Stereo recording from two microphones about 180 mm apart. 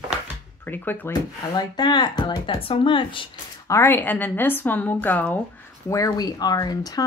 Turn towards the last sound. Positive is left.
turn(degrees=20)  # may be behind; listen again after turning